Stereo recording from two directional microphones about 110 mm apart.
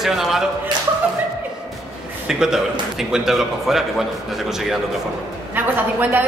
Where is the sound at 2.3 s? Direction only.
5° right (ahead or behind).